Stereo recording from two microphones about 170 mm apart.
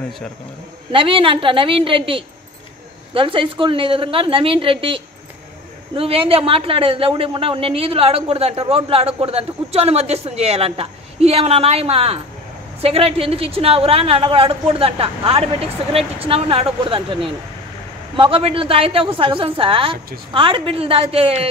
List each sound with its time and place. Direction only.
0.9 s a man's voice: 30° right (ahead or behind)